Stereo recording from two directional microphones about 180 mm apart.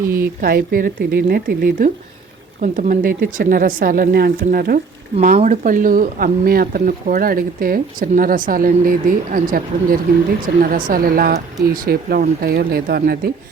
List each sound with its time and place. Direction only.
0.1 s speech: 55° right (ahead or behind)
5.1 s speech: 40° right (ahead or behind); by 13.3 s 60° right (ahead or behind)